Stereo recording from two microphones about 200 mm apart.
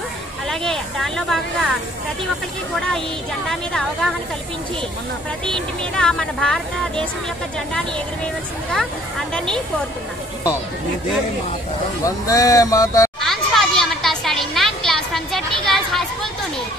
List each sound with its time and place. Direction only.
0.5 s speech: centre (ahead or behind)
3.4 s speech: centre (ahead or behind)
5.5 s speech: 5° left (ahead or behind)
12.0 s speech: 15° left (ahead or behind)
13.2 s a sound: centre (ahead or behind)